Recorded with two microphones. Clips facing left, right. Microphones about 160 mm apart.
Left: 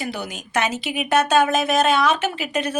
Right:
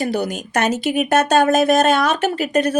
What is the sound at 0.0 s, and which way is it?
Speech, 45° right (ahead or behind).